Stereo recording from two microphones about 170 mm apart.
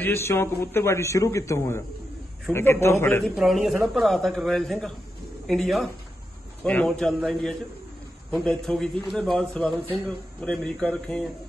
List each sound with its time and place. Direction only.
0.0 s a man's voice: 15° left (ahead or behind)
3.3 s a man's voice: centre (ahead or behind)